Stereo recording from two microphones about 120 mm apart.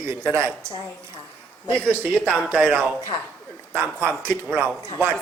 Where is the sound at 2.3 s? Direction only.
15° right (ahead or behind).